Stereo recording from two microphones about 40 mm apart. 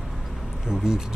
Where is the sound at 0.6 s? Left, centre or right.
Centre.